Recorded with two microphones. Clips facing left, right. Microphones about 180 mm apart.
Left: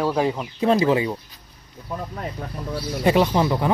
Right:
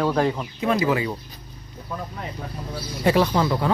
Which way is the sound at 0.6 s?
30° left (ahead or behind).